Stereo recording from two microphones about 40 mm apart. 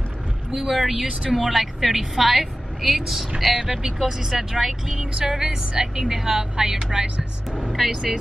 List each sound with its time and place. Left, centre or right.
0.6 s a woman's voice: centre; by 7.7 s right
7.7 s a woman's voice: centre